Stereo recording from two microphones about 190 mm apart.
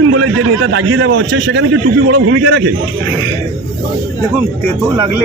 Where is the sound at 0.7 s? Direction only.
75° right (ahead or behind).